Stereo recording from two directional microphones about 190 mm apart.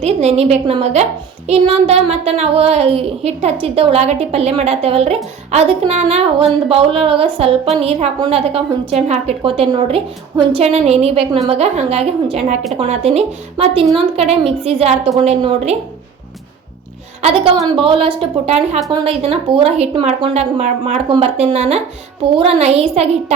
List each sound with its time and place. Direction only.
0.0 s a child's voice: 35° right (ahead or behind)
17.2 s a woman's voice: 30° right (ahead or behind)